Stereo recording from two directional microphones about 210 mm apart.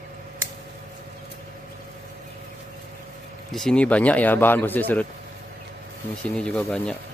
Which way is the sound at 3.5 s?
Centre (ahead or behind).